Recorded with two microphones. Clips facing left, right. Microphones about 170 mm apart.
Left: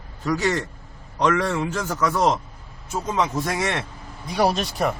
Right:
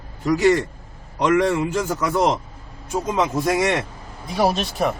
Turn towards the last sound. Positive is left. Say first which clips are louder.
# right 1 dB
turn(degrees=0)  # may be behind; listen again after turning